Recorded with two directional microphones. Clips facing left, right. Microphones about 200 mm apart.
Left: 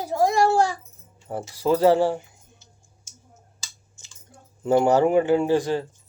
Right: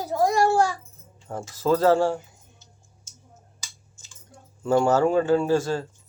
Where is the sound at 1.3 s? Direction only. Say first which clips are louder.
Left 1 dB; 15° left (ahead or behind).